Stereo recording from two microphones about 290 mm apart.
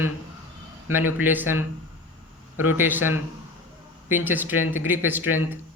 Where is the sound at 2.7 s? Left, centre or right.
Centre.